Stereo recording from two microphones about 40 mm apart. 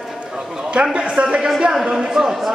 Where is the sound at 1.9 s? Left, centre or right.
Centre.